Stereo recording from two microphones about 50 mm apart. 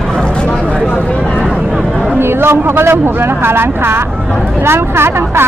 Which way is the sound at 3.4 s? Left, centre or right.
Right.